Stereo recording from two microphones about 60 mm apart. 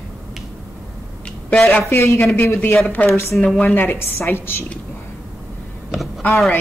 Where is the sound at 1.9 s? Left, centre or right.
Left.